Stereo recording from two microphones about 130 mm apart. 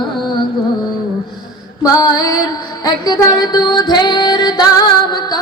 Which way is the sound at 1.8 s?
30° left (ahead or behind).